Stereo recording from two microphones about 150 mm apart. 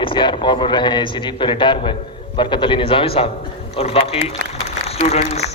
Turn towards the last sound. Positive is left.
turn(degrees=45)  # may be behind; listen again after turning